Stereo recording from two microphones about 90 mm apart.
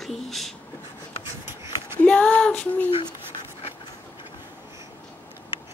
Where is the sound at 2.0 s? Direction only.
15° left (ahead or behind).